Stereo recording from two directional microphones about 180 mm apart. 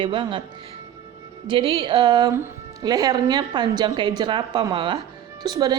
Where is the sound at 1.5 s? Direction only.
30° right (ahead or behind).